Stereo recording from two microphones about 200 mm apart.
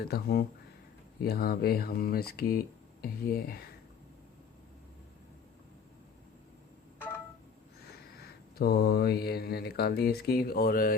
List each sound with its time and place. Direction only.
0.1 s speech: 50° left (ahead or behind)
8.2 s speech: 50° left (ahead or behind)